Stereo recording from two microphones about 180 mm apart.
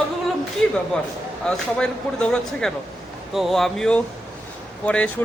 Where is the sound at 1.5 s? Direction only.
5° left (ahead or behind).